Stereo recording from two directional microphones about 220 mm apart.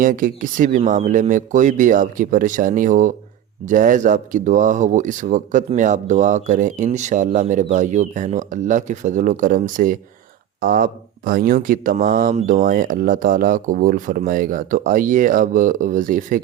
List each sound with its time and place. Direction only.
0.0 s speech: 40° right (ahead or behind)